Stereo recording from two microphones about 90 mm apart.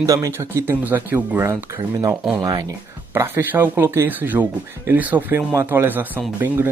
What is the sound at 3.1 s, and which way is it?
Speech, 30° right (ahead or behind).